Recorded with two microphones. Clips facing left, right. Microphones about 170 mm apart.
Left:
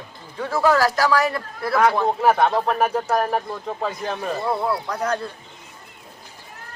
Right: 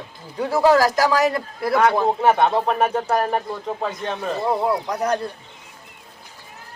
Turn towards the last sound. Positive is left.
turn(degrees=-20)  # may be behind; listen again after turning